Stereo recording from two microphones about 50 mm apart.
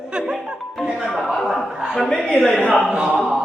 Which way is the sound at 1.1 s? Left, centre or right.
Centre.